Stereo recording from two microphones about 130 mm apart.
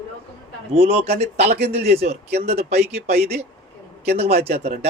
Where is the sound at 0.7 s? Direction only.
50° right (ahead or behind).